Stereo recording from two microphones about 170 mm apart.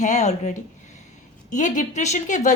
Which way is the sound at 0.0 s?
45° left (ahead or behind).